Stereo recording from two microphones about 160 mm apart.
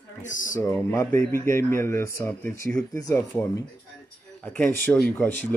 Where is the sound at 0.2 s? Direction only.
55° left (ahead or behind).